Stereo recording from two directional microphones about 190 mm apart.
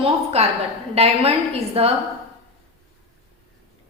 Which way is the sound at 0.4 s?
35° right (ahead or behind).